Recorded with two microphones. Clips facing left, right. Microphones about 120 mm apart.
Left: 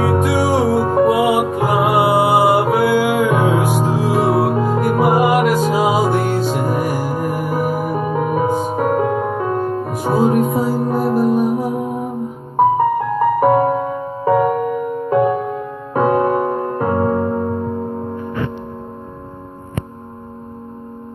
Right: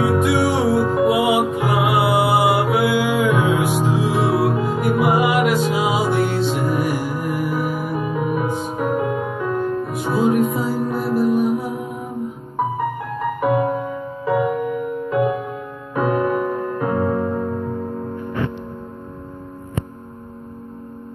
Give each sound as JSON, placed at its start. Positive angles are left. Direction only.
{"t": 0.0, "sound": "music", "side_deg": 40}
{"t": 9.5, "sound": "music", "side_deg": 30}
{"t": 16.0, "sound": "music", "side_deg": 30}